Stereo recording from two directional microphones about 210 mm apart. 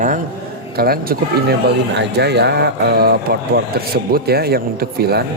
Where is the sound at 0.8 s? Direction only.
45° right (ahead or behind).